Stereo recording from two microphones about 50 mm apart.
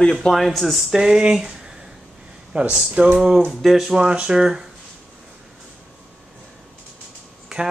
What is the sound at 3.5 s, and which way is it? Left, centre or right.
Speech, centre.